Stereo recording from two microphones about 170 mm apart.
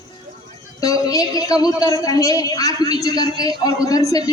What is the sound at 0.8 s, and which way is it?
A woman's voice, 20° left (ahead or behind).